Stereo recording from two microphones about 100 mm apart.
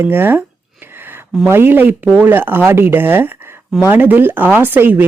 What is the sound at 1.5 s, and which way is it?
Speech, 20° right (ahead or behind).